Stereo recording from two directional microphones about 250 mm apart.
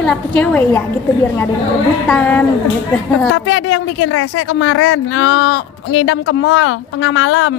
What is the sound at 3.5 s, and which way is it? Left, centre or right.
Speech, left.